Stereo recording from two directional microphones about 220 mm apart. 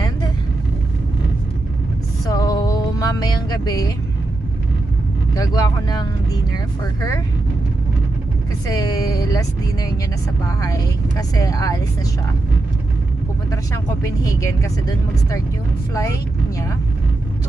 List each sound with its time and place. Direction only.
2.2 s music: 15° left (ahead or behind)
5.3 s speech: 15° left (ahead or behind)
8.6 s speech: 15° left (ahead or behind)
10.6 s speech: 15° left (ahead or behind)
14.0 s speech: 15° left (ahead or behind)